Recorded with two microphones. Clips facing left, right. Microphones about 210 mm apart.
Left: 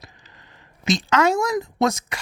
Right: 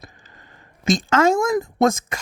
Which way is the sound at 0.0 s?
50° right (ahead or behind).